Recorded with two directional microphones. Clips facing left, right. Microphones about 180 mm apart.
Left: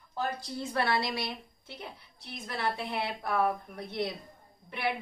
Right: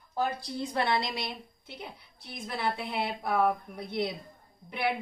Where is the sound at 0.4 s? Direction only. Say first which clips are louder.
Right 1 dB; 15° right (ahead or behind).